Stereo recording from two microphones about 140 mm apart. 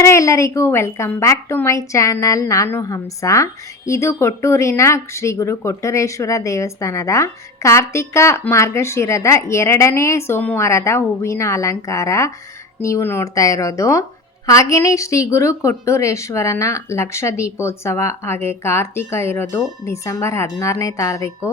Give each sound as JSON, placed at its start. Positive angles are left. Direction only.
{"t": 0.0, "sound": "a woman's voice", "side_deg": 20}